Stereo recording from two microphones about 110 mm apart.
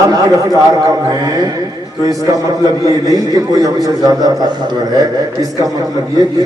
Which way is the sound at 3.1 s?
35° right (ahead or behind).